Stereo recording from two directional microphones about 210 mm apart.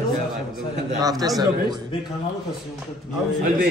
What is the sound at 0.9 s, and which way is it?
Speech, 15° right (ahead or behind).